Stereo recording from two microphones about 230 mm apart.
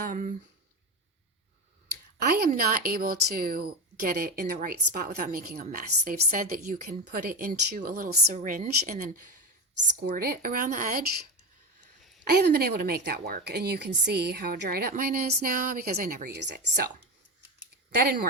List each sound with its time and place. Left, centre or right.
0.0 s speech: right
2.1 s speech: right
12.3 s speech: right
17.6 s scissors: right